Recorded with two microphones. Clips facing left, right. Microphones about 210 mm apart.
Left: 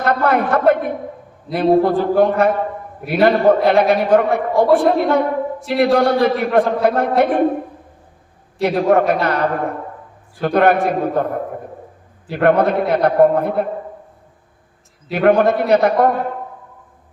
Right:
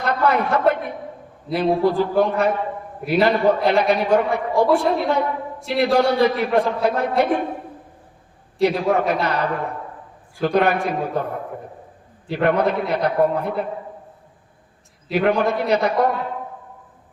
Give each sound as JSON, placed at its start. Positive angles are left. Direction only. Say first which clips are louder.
{"t": 0.0, "sound": "a sound", "louder": "left 3 dB", "side_deg": 55}
{"t": 1.5, "sound": "a man's voice", "louder": "left 4 dB", "side_deg": 50}
{"t": 4.5, "sound": "a woman's voice", "louder": "left 4 dB", "side_deg": 0}
{"t": 4.9, "sound": "a man's voice", "louder": "left 5 dB", "side_deg": 50}
{"t": 5.5, "sound": "a man's voice", "louder": "left 3 dB", "side_deg": 0}
{"t": 5.8, "sound": "a man's voice", "louder": "left 3 dB", "side_deg": 50}
{"t": 8.6, "sound": "a man's voice", "louder": "left 4 dB", "side_deg": 55}
{"t": 15.1, "sound": "a man's voice", "louder": "left 5 dB", "side_deg": 50}